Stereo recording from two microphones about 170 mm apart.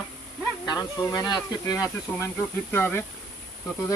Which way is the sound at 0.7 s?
20° left (ahead or behind).